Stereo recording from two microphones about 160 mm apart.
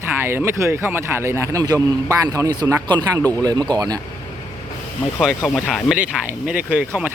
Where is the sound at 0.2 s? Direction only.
15° right (ahead or behind).